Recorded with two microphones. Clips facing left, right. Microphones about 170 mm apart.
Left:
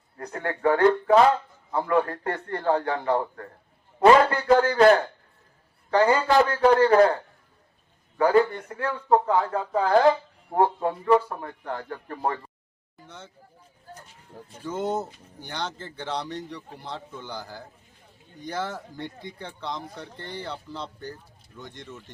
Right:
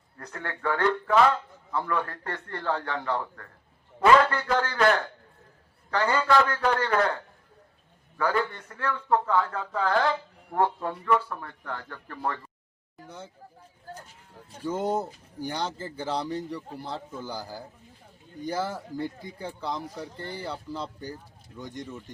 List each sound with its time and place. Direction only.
0.2 s a man's voice: 35° left (ahead or behind)
3.2 s a man's voice: 30° left (ahead or behind)
8.7 s speech: 25° left (ahead or behind)
10.0 s a man's voice: 20° left (ahead or behind)
13.1 s speech: 10° right (ahead or behind)
14.6 s a man's voice: 10° right (ahead or behind)